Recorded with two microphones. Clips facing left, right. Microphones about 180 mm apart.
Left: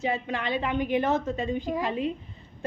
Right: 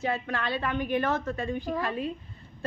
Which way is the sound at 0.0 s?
20° left (ahead or behind).